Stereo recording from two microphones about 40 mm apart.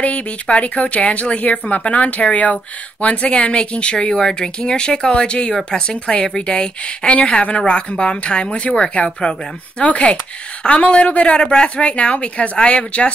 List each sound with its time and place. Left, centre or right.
0.0 s speech: left